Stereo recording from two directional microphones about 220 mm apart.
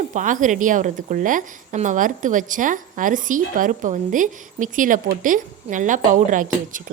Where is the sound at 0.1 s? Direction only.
35° right (ahead or behind).